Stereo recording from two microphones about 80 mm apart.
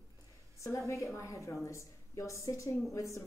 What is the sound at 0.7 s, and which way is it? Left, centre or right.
A woman's voice, left.